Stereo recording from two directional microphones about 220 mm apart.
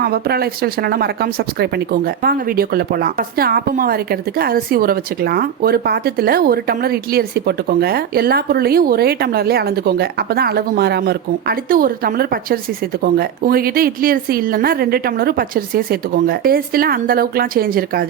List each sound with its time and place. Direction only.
0.0 s speech: 45° right (ahead or behind)